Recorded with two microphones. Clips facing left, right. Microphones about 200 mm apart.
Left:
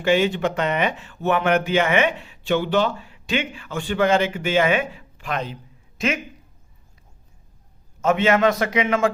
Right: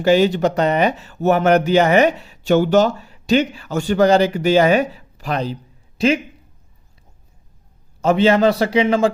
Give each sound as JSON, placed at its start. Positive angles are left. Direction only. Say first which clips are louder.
{"t": 0.0, "sound": "speech", "louder": "right 5 dB", "side_deg": -40}
{"t": 8.0, "sound": "speech", "louder": "right 4 dB", "side_deg": -30}